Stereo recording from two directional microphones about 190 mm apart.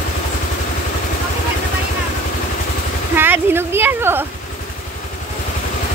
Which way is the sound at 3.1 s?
10° right (ahead or behind).